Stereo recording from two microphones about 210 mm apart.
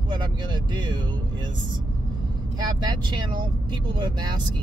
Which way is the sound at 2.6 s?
20° right (ahead or behind).